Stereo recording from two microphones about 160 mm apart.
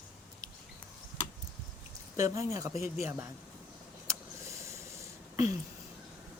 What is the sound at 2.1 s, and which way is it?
Speech, 20° right (ahead or behind).